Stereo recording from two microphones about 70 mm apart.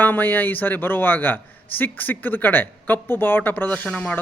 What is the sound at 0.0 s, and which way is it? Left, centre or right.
Speech, left.